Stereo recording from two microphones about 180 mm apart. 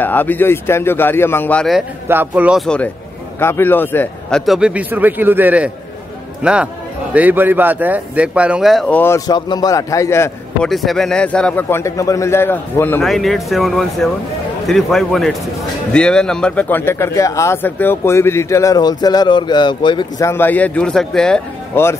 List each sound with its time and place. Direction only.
0.0 s speech: 10° left (ahead or behind)
2.0 s speech: 10° right (ahead or behind); by 4.4 s 10° left (ahead or behind)
4.5 s speech: 5° right (ahead or behind)
9.0 s speech: 20° left (ahead or behind)
10.7 s speech: centre (ahead or behind)
13.0 s speech: centre (ahead or behind); by 20.2 s 25° left (ahead or behind)
20.2 s speech: 10° left (ahead or behind)